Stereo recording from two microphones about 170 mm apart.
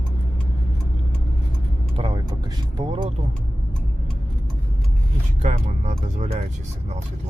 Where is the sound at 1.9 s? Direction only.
30° right (ahead or behind).